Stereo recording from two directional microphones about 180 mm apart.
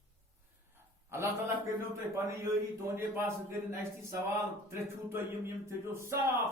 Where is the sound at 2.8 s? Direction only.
15° right (ahead or behind).